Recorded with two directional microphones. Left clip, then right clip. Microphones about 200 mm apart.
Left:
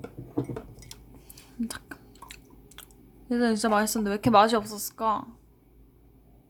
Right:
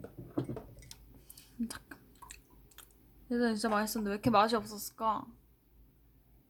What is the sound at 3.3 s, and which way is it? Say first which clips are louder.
Speech: left 7 dB; 5° left (ahead or behind).